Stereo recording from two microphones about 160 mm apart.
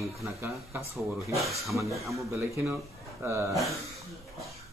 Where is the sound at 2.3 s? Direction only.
15° right (ahead or behind).